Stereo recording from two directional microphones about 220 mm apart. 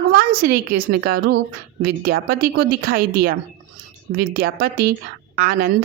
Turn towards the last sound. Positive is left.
turn(degrees=-40)  # may be behind; listen again after turning